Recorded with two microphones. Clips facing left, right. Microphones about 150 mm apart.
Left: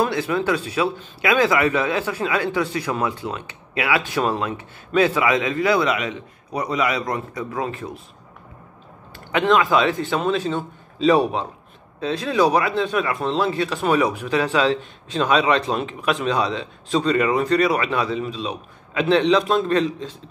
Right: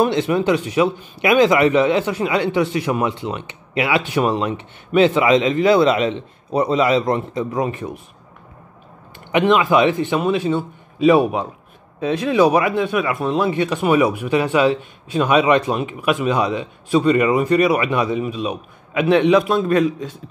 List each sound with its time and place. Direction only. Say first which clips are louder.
0.0 s a man's voice: right 4 dB; 20° right (ahead or behind)
9.3 s speech: right 3 dB; 15° right (ahead or behind)